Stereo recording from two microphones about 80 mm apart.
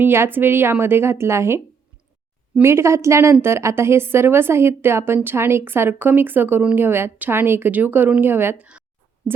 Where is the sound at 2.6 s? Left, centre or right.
Right.